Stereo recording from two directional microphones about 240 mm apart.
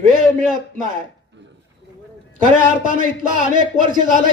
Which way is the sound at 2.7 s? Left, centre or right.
Right.